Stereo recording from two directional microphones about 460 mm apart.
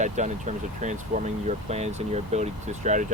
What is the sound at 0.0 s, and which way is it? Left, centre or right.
Speech, centre.